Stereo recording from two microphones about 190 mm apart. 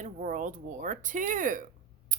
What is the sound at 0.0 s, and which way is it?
A woman's voice, 45° right (ahead or behind).